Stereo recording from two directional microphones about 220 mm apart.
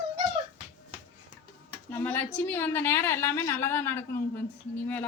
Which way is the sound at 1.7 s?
10° left (ahead or behind).